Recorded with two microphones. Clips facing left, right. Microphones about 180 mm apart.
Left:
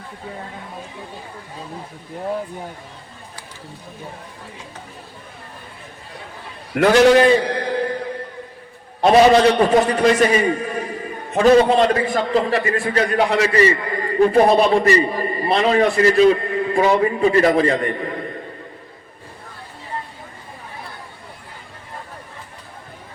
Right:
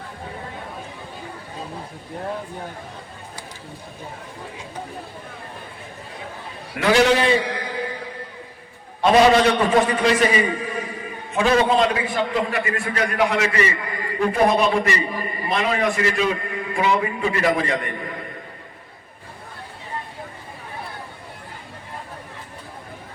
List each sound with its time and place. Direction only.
6.7 s a man's voice: 50° left (ahead or behind)
9.5 s a man's voice: 40° left (ahead or behind)